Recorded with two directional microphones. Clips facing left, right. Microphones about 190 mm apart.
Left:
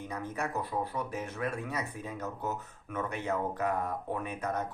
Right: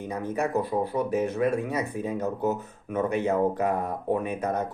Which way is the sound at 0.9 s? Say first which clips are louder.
Right 11 dB; 15° right (ahead or behind).